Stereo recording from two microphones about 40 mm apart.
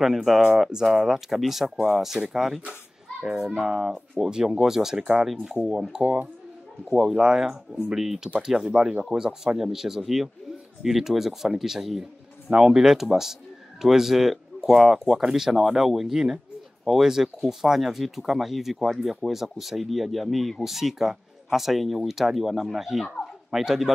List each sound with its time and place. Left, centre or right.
0.0 s speech: centre
3.2 s a child's voice: right
7.2 s speech: centre